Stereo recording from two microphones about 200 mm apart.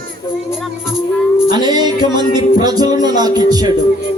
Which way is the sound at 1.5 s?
20° right (ahead or behind).